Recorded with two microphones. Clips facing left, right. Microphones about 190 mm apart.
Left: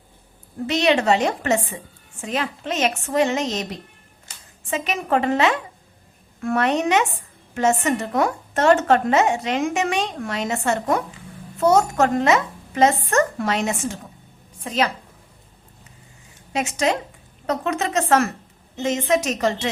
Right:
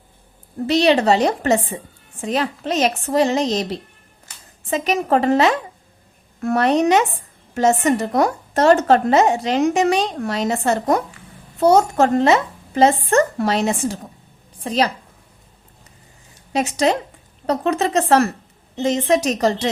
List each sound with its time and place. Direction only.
0.7 s a woman's voice: 35° right (ahead or behind)
16.5 s a woman's voice: 35° right (ahead or behind)